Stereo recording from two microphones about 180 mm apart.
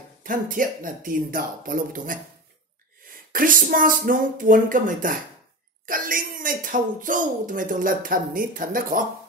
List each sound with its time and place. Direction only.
0.2 s speech: 50° right (ahead or behind)
3.3 s speech: 50° right (ahead or behind)